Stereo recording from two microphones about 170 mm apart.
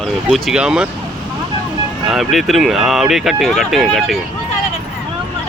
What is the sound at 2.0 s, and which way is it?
Speech, centre (ahead or behind).